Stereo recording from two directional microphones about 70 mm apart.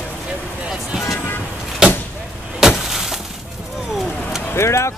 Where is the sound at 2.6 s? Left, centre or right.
Centre.